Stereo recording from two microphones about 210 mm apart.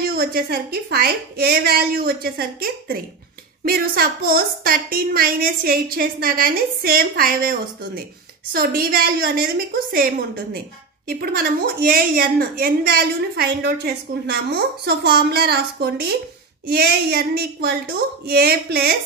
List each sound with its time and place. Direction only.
0.1 s a woman's voice: 45° right (ahead or behind)